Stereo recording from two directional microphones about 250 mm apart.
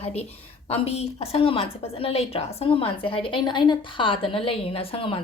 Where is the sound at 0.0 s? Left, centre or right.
Left.